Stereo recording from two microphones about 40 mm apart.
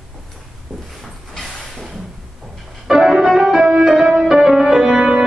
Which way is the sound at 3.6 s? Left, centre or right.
Right.